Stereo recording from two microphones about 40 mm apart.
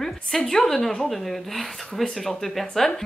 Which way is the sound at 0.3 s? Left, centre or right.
Centre.